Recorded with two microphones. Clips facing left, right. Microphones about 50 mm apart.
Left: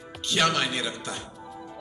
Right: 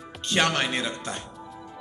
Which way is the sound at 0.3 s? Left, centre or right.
Right.